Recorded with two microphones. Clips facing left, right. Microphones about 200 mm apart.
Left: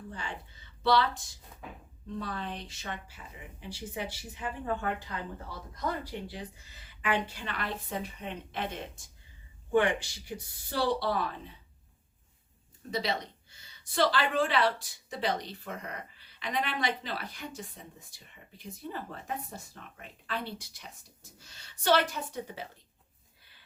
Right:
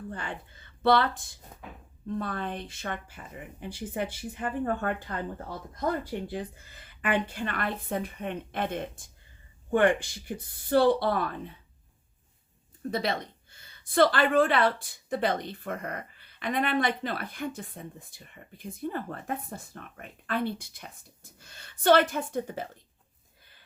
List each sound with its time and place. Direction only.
0.1 s a woman's voice: 55° right (ahead or behind)
12.9 s a woman's voice: 55° right (ahead or behind)